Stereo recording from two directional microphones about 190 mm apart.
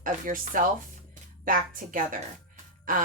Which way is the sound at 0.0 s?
45° right (ahead or behind).